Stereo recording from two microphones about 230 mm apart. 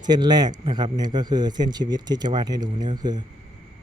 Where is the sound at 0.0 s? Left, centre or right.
Centre.